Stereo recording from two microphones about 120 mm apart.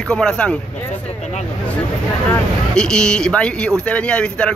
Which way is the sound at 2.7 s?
5° left (ahead or behind).